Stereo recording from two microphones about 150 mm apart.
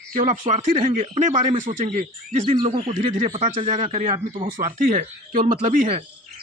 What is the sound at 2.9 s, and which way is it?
Speech, 50° right (ahead or behind).